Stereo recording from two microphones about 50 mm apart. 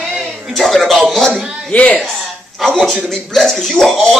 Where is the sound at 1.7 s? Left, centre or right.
Left.